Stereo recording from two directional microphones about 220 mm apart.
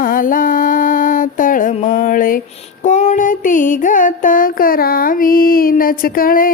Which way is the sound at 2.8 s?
35° left (ahead or behind).